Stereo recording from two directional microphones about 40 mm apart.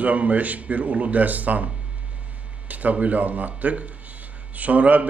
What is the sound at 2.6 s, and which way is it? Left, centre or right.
A man's voice, right.